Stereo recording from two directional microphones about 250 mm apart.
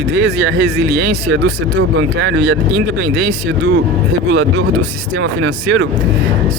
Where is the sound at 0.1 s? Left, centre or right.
Right.